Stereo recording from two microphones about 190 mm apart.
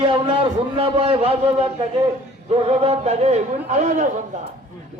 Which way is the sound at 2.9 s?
35° right (ahead or behind).